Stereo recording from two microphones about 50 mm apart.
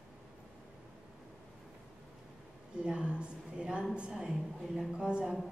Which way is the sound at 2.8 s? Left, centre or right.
Right.